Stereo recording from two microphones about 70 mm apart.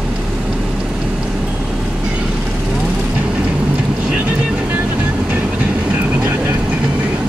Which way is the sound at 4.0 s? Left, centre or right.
Centre.